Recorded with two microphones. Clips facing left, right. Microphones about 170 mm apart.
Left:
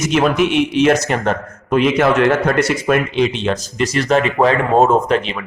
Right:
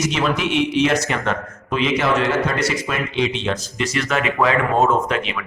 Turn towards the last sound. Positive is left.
turn(degrees=35)  # may be behind; listen again after turning